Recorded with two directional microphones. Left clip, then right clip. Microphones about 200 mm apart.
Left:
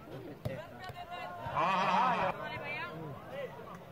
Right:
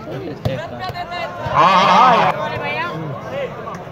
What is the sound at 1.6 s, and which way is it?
Speech, 35° right (ahead or behind).